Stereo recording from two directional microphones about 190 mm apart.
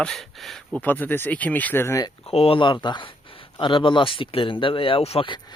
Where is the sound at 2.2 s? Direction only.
30° left (ahead or behind).